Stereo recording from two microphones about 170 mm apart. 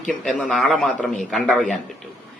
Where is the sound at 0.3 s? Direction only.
5° left (ahead or behind).